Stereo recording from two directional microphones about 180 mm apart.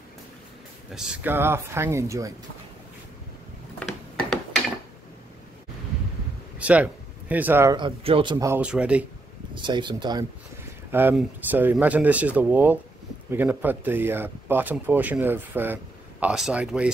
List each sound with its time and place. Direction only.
0.9 s speech: 5° right (ahead or behind)
3.8 s a sound: 5° left (ahead or behind)
6.6 s speech: 10° right (ahead or behind)
7.7 s a man's voice: 30° right (ahead or behind)
8.5 s speech: 5° right (ahead or behind)
9.6 s a man's voice: 25° right (ahead or behind)
10.9 s speech: 10° right (ahead or behind)